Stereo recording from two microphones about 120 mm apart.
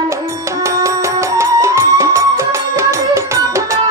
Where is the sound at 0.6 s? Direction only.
25° right (ahead or behind).